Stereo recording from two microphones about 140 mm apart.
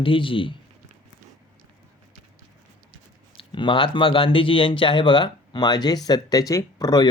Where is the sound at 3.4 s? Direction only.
35° left (ahead or behind).